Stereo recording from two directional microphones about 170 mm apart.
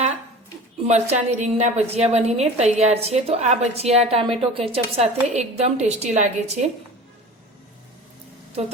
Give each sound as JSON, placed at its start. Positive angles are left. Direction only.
{"t": 0.9, "sound": "a woman's voice", "side_deg": -45}